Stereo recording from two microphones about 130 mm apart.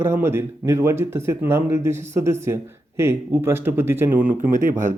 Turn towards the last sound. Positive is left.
turn(degrees=-90)